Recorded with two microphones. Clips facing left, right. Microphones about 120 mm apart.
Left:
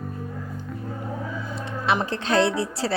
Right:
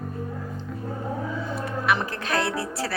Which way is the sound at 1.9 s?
25° left (ahead or behind).